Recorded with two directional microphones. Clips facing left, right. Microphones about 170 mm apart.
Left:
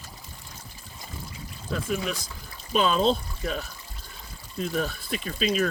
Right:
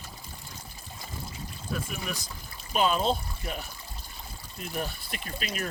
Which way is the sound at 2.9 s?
90° left.